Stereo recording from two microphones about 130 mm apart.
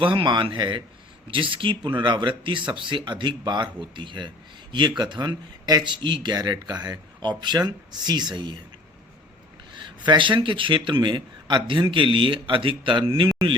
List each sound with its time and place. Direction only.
0.0 s speech: 40° right (ahead or behind)
10.1 s speech: 40° right (ahead or behind)